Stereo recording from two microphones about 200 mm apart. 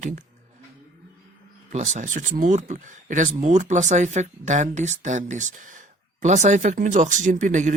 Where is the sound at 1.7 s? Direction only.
35° right (ahead or behind).